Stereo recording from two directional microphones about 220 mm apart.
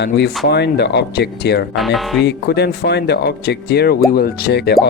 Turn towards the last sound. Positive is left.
turn(degrees=50)  # may be behind; listen again after turning